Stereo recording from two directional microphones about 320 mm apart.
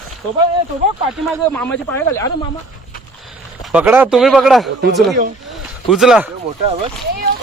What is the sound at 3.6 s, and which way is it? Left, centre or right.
Speech, centre.